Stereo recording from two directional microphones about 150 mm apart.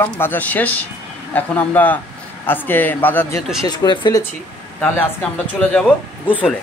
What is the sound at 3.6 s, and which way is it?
Speech, 30° left (ahead or behind).